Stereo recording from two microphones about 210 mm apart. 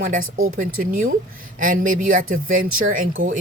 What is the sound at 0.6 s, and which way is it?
Speech, 40° right (ahead or behind).